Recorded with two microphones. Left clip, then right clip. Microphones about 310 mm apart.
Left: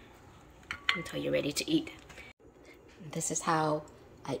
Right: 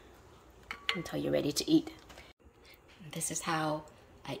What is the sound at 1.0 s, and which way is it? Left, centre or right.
Speech, right.